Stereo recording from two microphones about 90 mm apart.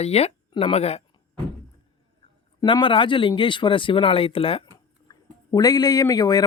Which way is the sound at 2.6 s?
65° left (ahead or behind).